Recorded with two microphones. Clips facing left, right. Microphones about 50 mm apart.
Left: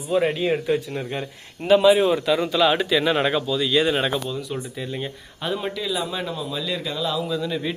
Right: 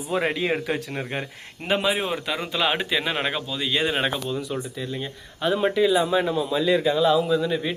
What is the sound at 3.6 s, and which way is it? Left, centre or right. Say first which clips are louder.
Speech: left 2 dB; right.